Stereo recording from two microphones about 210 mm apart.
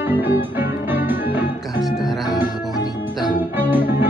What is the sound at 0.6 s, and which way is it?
Music, 10° right (ahead or behind).